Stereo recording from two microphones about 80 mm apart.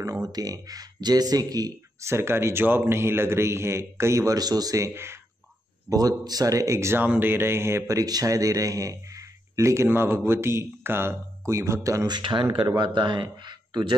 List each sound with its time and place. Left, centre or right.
0.0 s speech: right
2.0 s a man's voice: right
4.4 s a man's voice: right
5.9 s speech: right
7.0 s a man's voice: right
8.0 s a man's voice: right
12.1 s speech: right
12.6 s speech: right